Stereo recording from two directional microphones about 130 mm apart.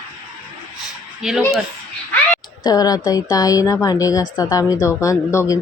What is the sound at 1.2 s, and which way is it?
Speech, 5° right (ahead or behind).